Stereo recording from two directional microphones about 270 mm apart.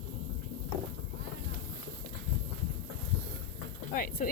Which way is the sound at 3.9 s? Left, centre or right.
Left.